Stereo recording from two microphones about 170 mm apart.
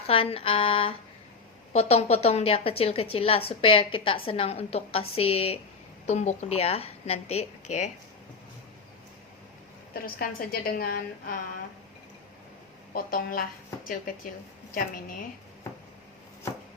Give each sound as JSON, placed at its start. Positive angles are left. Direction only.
{"t": 0.1, "sound": "a woman's voice", "side_deg": 35}
{"t": 9.9, "sound": "a woman's voice", "side_deg": 60}
{"t": 12.9, "sound": "a woman's voice", "side_deg": 60}